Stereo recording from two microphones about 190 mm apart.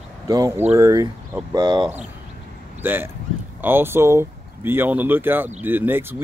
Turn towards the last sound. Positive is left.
turn(degrees=-10)  # may be behind; listen again after turning